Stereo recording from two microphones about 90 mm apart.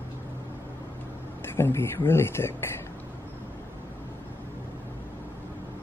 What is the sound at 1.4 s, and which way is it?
Speech, 25° left (ahead or behind).